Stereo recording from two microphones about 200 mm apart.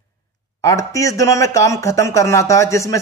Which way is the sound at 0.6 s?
15° left (ahead or behind).